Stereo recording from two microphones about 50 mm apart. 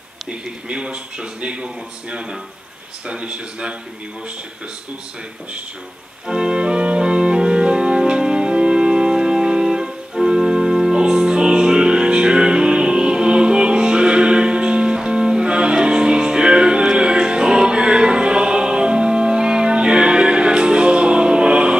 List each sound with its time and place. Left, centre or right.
0.3 s speech: centre
6.2 s music: centre